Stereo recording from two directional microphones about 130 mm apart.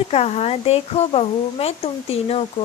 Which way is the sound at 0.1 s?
55° left (ahead or behind).